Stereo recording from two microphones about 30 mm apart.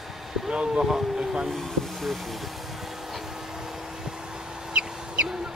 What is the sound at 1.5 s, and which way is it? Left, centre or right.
Speech, centre.